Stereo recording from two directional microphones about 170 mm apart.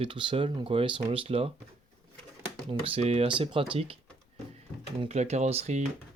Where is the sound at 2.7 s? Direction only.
30° right (ahead or behind).